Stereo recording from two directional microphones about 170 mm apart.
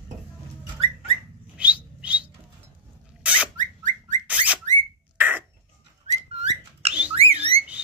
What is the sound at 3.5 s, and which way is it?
Bird, 50° right (ahead or behind).